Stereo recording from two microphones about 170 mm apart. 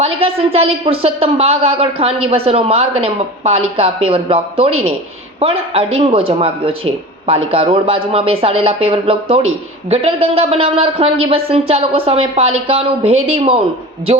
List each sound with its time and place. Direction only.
0.0 s speech: 35° right (ahead or behind)